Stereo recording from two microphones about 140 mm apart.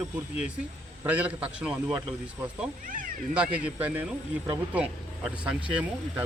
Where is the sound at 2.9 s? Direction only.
70° right (ahead or behind).